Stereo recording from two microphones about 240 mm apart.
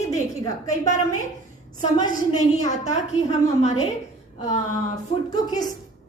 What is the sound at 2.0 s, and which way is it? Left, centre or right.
Speech, centre.